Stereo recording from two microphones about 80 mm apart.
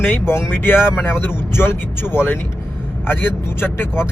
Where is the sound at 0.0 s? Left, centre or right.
Left.